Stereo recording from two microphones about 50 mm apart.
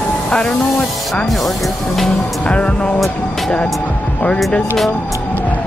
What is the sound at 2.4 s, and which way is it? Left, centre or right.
Speech, left.